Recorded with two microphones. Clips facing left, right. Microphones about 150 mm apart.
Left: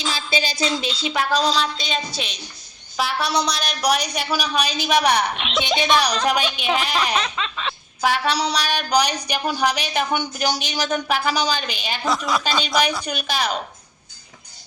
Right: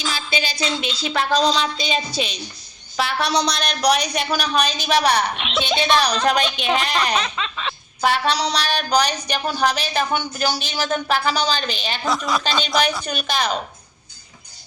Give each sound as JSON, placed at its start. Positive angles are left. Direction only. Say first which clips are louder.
{"t": 0.0, "sound": "a sound", "louder": "left 1 dB", "side_deg": 35}
{"t": 0.8, "sound": "a woman's voice", "louder": "even", "side_deg": 35}
{"t": 1.1, "sound": "a woman's voice", "louder": "right 2 dB", "side_deg": 10}
{"t": 5.3, "sound": "a woman's voice", "louder": "even", "side_deg": 0}
{"t": 5.5, "sound": "a woman's voice", "louder": "right 1 dB", "side_deg": 10}